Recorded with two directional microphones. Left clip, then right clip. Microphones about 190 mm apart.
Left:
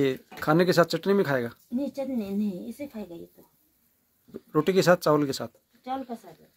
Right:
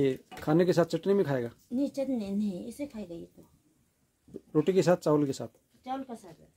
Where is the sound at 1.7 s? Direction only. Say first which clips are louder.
Even; 60° right (ahead or behind).